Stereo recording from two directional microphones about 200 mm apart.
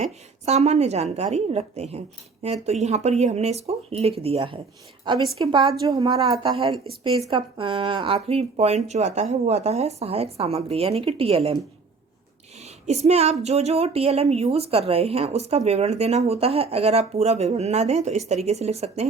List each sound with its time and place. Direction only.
0.0 s speech: 35° right (ahead or behind)
12.8 s speech: 35° right (ahead or behind)